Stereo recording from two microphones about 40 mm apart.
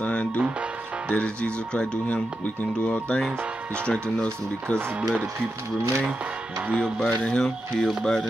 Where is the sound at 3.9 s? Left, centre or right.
Left.